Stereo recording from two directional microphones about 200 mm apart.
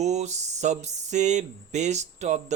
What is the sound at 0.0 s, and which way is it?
Speech, 35° right (ahead or behind).